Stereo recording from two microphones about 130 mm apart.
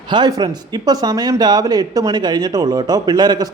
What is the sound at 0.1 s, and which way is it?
Speech, 30° right (ahead or behind).